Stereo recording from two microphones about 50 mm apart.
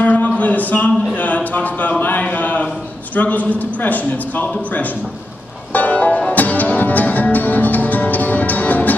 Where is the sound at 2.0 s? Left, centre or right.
Left.